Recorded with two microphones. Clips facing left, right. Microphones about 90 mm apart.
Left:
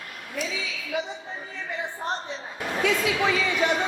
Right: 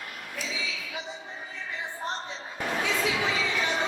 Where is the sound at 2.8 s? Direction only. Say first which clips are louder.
Left 6 dB; 60° left (ahead or behind).